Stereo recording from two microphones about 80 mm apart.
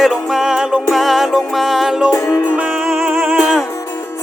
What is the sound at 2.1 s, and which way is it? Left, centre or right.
Music, left.